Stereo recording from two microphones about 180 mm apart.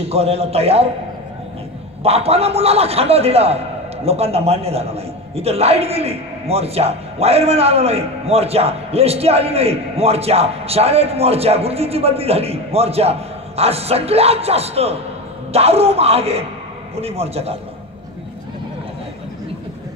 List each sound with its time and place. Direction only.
0.1 s a man's voice: 35° right (ahead or behind)
2.0 s a man's voice: 35° right (ahead or behind)